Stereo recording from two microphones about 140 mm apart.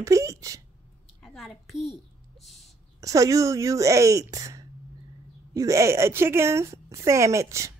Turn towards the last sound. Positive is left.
turn(degrees=-20)  # may be behind; listen again after turning